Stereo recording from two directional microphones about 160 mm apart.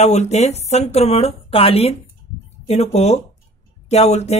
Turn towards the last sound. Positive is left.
turn(degrees=45)  # may be behind; listen again after turning